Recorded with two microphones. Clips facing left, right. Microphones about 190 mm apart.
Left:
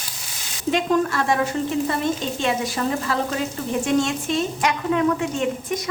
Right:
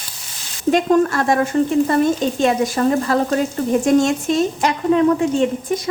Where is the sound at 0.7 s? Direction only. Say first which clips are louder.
Right 5 dB; 45° right (ahead or behind).